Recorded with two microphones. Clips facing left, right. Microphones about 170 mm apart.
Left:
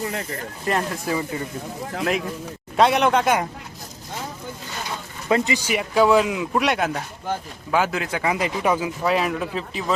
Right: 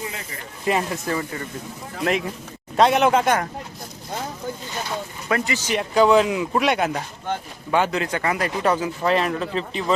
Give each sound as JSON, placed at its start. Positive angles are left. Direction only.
{"t": 0.0, "sound": "speech", "side_deg": 55}
{"t": 0.6, "sound": "speech", "side_deg": -5}
{"t": 1.1, "sound": "speech", "side_deg": 5}
{"t": 2.7, "sound": "speech", "side_deg": 0}
{"t": 5.3, "sound": "speech", "side_deg": 15}